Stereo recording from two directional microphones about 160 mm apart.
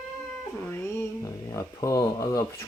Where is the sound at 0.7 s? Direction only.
15° left (ahead or behind).